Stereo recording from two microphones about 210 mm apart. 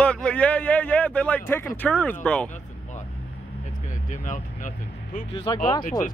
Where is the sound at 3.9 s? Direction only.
40° left (ahead or behind).